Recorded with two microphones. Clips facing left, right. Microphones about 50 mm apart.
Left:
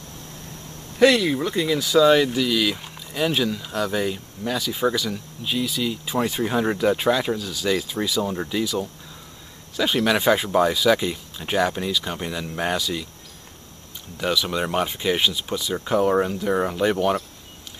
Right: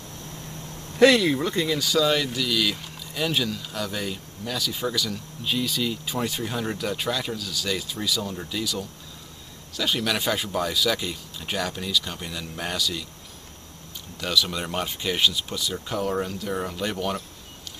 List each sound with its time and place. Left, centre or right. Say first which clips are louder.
0.9 s speech: even; centre
5.4 s speech: left 1 dB; centre
6.1 s speech: left 10 dB; centre
14.1 s speech: left 3 dB; centre